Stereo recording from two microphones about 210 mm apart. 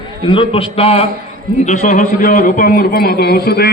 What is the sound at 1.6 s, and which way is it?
A man's voice, 40° left (ahead or behind).